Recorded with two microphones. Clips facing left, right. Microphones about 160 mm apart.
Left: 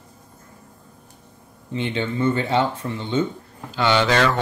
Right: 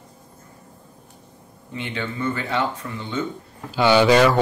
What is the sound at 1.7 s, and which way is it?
Speech, 25° left (ahead or behind).